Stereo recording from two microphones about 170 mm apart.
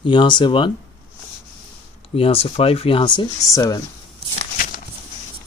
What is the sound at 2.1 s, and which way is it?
Speech, 35° left (ahead or behind).